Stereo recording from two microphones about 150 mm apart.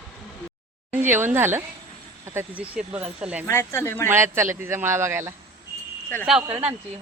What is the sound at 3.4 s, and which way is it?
Speech, 15° left (ahead or behind).